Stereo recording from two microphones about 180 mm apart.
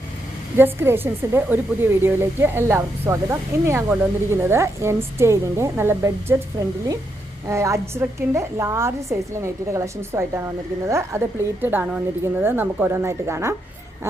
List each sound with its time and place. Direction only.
0.5 s a woman's voice: 10° right (ahead or behind)